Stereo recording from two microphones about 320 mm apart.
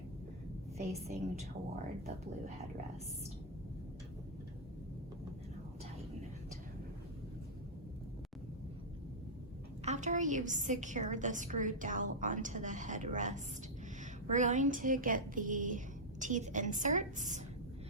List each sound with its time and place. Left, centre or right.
0.8 s a woman's voice: centre
9.8 s a woman's voice: right